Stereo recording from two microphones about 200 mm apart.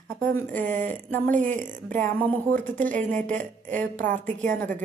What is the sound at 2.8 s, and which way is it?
A woman's voice, 40° right (ahead or behind).